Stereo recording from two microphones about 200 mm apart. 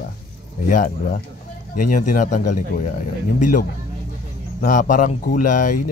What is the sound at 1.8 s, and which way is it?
Speech, 40° left (ahead or behind).